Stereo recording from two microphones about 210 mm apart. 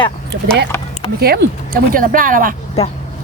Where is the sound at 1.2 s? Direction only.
50° right (ahead or behind).